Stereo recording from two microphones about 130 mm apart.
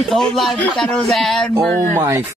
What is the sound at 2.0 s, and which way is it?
Speech, 15° right (ahead or behind).